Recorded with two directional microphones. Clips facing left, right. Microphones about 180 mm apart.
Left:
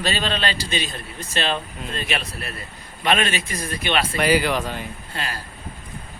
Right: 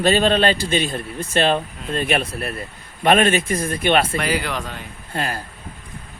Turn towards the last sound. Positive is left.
turn(degrees=-50)  # may be behind; listen again after turning